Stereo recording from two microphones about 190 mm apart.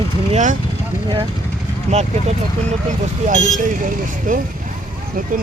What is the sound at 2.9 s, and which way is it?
Speech, 40° right (ahead or behind).